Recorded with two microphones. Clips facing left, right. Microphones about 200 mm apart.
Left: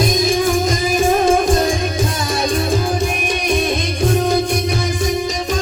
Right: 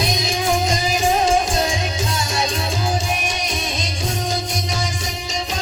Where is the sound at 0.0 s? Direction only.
50° left (ahead or behind).